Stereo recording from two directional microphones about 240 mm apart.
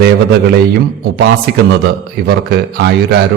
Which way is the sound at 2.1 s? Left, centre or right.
Right.